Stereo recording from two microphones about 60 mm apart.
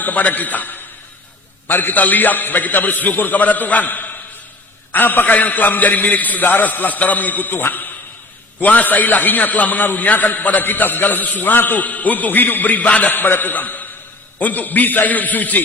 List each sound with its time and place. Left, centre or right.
0.0 s a man's voice: left